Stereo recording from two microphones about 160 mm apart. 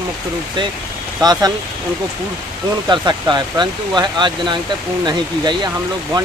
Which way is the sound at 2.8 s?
25° right (ahead or behind).